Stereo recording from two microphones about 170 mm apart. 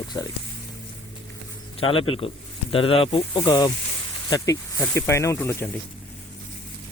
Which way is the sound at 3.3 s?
20° left (ahead or behind).